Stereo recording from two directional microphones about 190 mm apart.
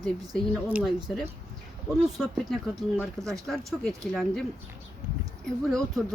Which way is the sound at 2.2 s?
Centre (ahead or behind).